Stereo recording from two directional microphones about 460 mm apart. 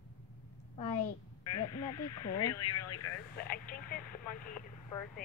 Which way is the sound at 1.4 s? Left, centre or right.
Left.